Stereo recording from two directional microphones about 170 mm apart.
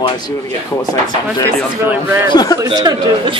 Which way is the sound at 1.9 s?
25° left (ahead or behind).